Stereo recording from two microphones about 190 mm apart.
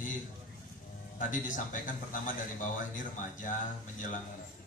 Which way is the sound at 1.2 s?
45° left (ahead or behind).